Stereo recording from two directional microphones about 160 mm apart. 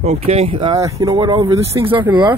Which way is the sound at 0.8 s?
20° right (ahead or behind).